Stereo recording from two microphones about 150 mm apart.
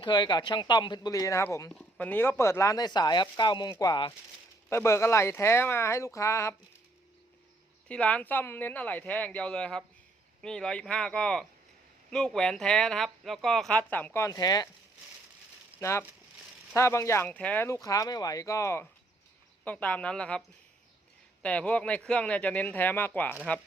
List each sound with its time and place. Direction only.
0.0 s speech: 30° left (ahead or behind)
1.7 s speech: 10° left (ahead or behind); by 4.1 s 30° left (ahead or behind)
4.7 s speech: 15° left (ahead or behind)
7.9 s speech: 10° left (ahead or behind); by 14.7 s 25° left (ahead or behind)
15.8 s speech: 20° left (ahead or behind)
21.4 s speech: 10° left (ahead or behind)